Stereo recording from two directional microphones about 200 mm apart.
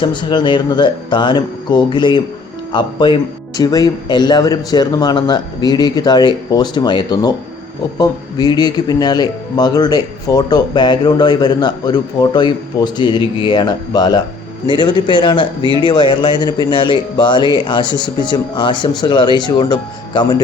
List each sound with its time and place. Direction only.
0.0 s speech: 25° left (ahead or behind)